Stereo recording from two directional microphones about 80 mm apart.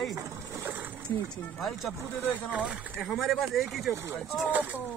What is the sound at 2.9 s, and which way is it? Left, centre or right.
Speech, centre.